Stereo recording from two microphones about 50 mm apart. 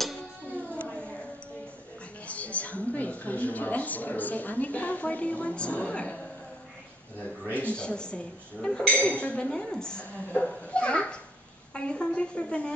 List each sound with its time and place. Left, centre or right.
0.7 s a sound: left
2.2 s a woman's voice: left
7.5 s a woman's voice: left